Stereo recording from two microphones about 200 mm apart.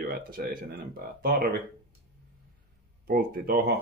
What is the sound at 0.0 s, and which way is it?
Speech, 45° right (ahead or behind).